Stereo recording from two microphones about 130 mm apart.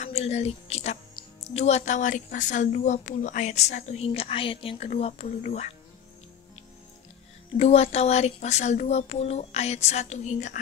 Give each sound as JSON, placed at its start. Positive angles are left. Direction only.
{"t": 0.0, "sound": "a woman's voice", "side_deg": 55}
{"t": 7.5, "sound": "a woman's voice", "side_deg": 55}